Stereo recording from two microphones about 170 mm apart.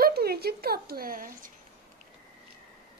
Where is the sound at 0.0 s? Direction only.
65° right (ahead or behind).